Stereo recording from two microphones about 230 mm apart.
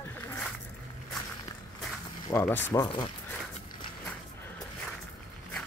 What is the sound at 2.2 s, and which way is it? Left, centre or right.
Speech, centre.